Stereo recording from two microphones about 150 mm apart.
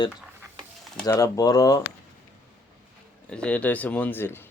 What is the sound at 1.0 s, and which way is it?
Speech, 20° left (ahead or behind).